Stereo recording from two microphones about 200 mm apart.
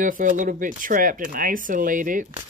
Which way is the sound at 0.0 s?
40° right (ahead or behind).